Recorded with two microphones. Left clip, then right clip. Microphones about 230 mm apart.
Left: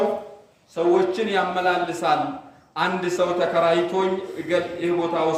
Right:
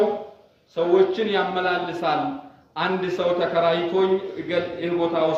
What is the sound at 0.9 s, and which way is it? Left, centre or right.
A man's voice, centre.